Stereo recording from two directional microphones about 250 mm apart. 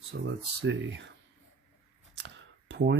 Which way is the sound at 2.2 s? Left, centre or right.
Right.